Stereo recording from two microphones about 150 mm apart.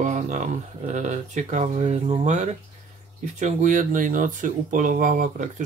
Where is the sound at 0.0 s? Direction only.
55° right (ahead or behind).